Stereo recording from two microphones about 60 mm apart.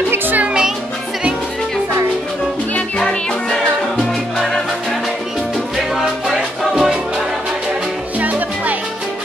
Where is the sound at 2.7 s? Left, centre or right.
Centre.